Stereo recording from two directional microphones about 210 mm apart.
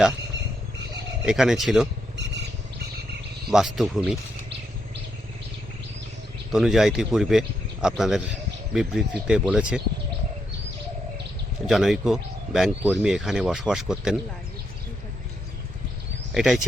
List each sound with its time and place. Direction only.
1.2 s speech: 5° right (ahead or behind)
2.1 s a sound: 55° right (ahead or behind)
3.5 s speech: centre (ahead or behind)
6.5 s speech: centre (ahead or behind)
11.6 s speech: centre (ahead or behind)
16.3 s speech: centre (ahead or behind)